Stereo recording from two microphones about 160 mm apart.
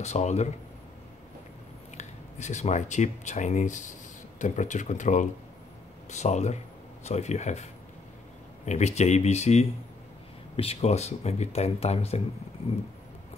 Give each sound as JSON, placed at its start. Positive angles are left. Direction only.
{"t": 0.0, "sound": "speech", "side_deg": 45}
{"t": 2.0, "sound": "speech", "side_deg": 45}
{"t": 8.6, "sound": "speech", "side_deg": 45}